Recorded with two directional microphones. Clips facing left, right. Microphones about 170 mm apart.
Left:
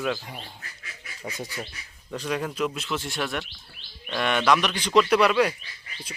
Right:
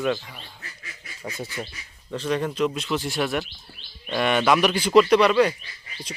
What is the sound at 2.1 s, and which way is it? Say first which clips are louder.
Speech: right 4 dB; 10° left (ahead or behind).